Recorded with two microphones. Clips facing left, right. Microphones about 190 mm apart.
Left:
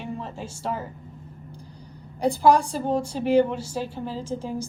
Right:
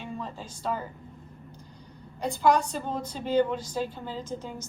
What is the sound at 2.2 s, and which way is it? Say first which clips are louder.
A woman's voice: left 5 dB; 30° left (ahead or behind).